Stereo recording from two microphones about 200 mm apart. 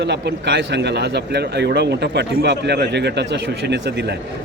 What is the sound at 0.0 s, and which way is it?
Speech, 60° right (ahead or behind).